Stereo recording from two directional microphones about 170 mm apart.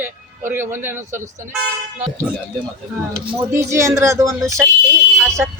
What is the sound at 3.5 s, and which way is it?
A man's voice, 15° right (ahead or behind).